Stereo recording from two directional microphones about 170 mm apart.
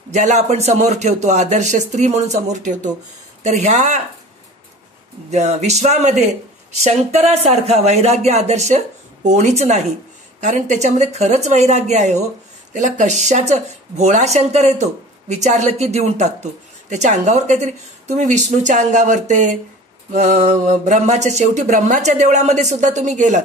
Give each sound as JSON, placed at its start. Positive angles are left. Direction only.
{"t": 0.1, "sound": "speech", "side_deg": -45}
{"t": 5.3, "sound": "speech", "side_deg": -40}